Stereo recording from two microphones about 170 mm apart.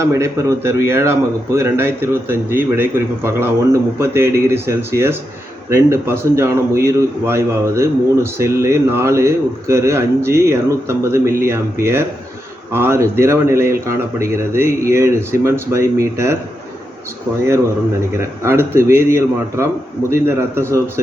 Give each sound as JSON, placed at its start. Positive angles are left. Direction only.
{"t": 0.0, "sound": "a man's voice", "side_deg": -20}
{"t": 18.4, "sound": "a man's voice", "side_deg": -15}